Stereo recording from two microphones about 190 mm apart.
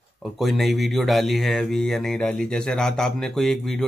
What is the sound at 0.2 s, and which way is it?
Speech, centre (ahead or behind).